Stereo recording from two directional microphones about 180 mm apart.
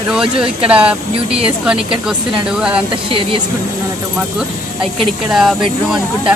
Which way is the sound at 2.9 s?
30° right (ahead or behind).